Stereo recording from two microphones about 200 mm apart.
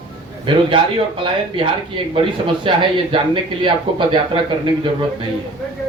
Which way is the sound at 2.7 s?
25° right (ahead or behind).